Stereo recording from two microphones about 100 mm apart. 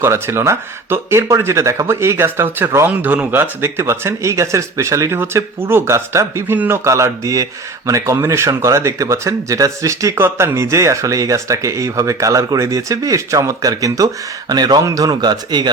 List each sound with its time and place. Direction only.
0.0 s speech: 25° right (ahead or behind); by 15.7 s 45° right (ahead or behind)